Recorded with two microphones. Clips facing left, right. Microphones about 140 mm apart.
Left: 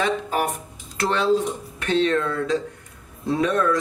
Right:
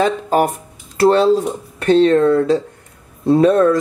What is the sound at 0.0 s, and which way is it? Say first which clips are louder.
Speech: right 7 dB; 35° right (ahead or behind).